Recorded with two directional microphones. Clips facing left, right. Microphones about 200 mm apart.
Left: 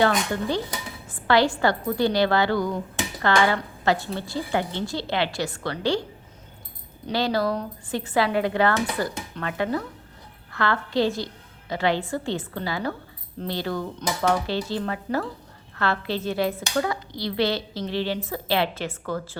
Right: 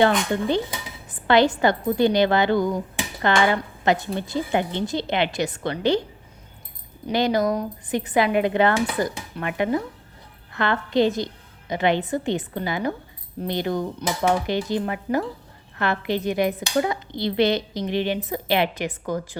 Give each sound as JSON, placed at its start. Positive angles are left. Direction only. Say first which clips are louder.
{"t": 0.0, "sound": "a woman's voice", "louder": "right 3 dB", "side_deg": -20}
{"t": 7.1, "sound": "a woman's voice", "louder": "right 3 dB", "side_deg": -20}